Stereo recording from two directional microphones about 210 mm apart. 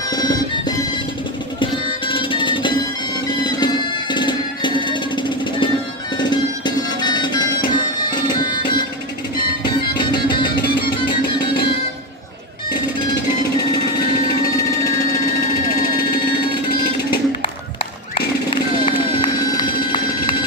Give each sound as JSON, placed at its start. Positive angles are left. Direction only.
{"t": 0.1, "sound": "music", "side_deg": 20}
{"t": 9.9, "sound": "music", "side_deg": 20}
{"t": 18.9, "sound": "run", "side_deg": 20}